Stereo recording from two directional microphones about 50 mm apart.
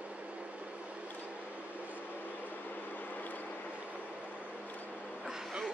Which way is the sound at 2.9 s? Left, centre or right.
Left.